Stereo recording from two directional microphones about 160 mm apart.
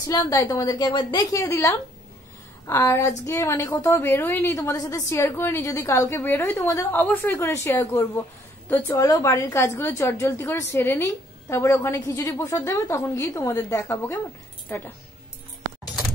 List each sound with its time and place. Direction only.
0.1 s a woman's voice: 25° left (ahead or behind)